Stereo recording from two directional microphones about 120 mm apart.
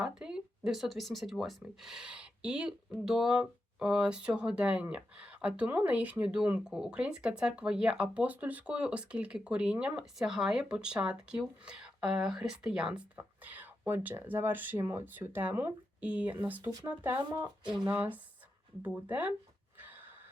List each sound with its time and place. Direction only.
0.0 s speech: 5° right (ahead or behind)
17.4 s speech: 40° right (ahead or behind)
17.8 s speech: 15° right (ahead or behind)
19.8 s gasp: 15° right (ahead or behind)